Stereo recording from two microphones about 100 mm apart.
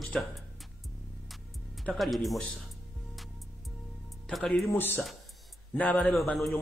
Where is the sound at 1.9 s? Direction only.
Centre (ahead or behind).